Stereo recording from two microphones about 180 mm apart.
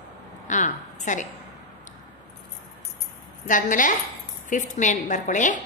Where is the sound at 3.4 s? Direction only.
45° left (ahead or behind).